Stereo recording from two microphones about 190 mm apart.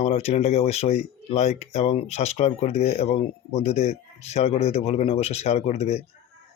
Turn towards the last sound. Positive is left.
turn(degrees=35)  # may be behind; listen again after turning